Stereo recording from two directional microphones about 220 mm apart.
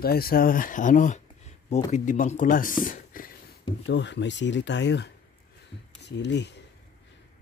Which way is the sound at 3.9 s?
55° left (ahead or behind).